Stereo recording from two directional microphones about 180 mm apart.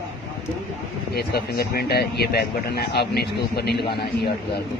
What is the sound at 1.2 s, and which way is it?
Speech, 60° left (ahead or behind).